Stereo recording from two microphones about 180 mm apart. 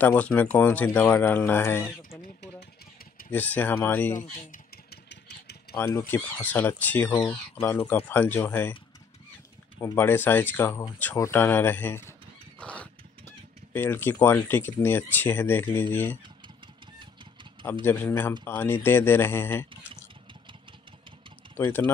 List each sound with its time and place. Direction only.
0.0 s speech: 10° left (ahead or behind)
3.3 s speech: 10° left (ahead or behind)
5.1 s engine: 65° left (ahead or behind)
5.8 s speech: 15° left (ahead or behind)
9.8 s speech: 10° left (ahead or behind)
12.5 s a sound: 5° left (ahead or behind)
13.7 s speech: 10° left (ahead or behind)
17.0 s vehicle: 25° right (ahead or behind)
17.8 s speech: 10° left (ahead or behind)
21.5 s speech: 10° left (ahead or behind)